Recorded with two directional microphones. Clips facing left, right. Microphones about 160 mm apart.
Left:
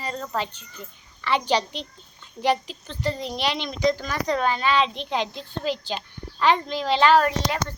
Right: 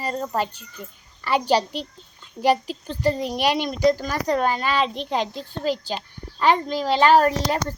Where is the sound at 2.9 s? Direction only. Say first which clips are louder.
Right 5 dB; 40° right (ahead or behind).